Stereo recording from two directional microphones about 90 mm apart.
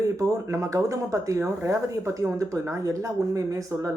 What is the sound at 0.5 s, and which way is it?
Speech, 40° right (ahead or behind).